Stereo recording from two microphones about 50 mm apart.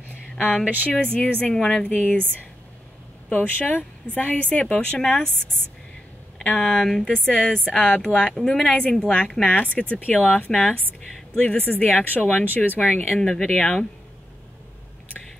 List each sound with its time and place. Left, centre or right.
0.8 s a woman's voice: left
1.5 s a woman's voice: centre
3.3 s a woman's voice: left
6.4 s a woman's voice: centre
6.8 s a woman's voice: centre
7.2 s a woman's voice: centre
10.5 s speech: centre
11.3 s a woman's voice: left
11.6 s speech: left
13.2 s speech: centre
13.5 s a woman's voice: left